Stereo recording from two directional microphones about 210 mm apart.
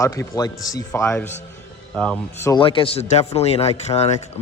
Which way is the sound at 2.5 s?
25° left (ahead or behind).